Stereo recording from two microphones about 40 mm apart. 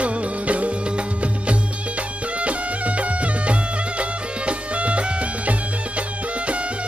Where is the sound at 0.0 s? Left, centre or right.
Right.